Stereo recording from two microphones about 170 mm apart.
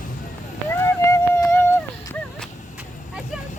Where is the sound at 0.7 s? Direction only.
15° left (ahead or behind).